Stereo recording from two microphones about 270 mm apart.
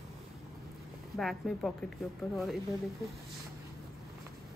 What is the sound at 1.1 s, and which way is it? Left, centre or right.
Speech, centre.